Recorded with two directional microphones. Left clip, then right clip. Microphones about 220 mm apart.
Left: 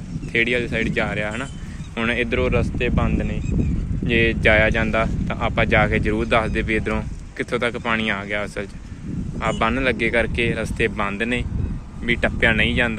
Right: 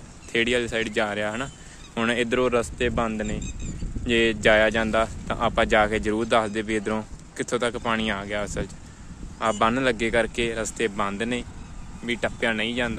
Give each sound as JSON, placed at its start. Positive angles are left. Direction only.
{"t": 0.3, "sound": "speech", "side_deg": -25}